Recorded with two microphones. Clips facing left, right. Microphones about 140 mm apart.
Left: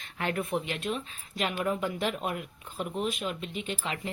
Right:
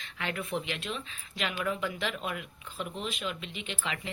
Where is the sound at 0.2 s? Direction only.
45° left (ahead or behind).